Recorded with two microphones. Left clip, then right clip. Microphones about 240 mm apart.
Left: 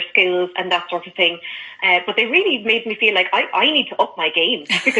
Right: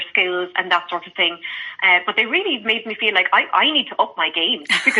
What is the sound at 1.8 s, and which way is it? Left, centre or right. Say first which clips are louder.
Speech: right 1 dB; right.